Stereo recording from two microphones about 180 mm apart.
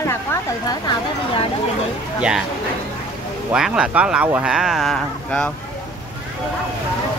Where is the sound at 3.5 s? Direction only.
5° right (ahead or behind).